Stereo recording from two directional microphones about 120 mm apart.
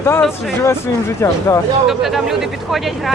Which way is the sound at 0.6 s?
20° left (ahead or behind).